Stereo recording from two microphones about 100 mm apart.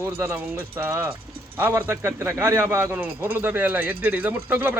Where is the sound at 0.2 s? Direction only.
25° right (ahead or behind).